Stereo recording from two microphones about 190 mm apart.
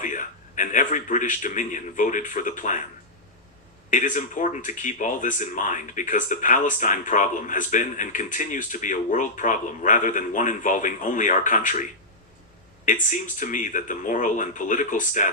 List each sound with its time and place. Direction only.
0.0 s a man's voice: 40° left (ahead or behind)
3.8 s speech: 40° left (ahead or behind)